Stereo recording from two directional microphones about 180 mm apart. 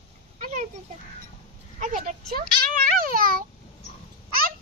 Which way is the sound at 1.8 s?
45° right (ahead or behind).